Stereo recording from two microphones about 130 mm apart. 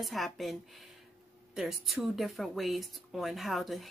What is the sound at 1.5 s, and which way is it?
Speech, centre (ahead or behind).